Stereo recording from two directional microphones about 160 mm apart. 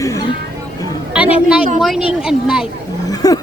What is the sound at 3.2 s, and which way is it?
Speech, 25° left (ahead or behind).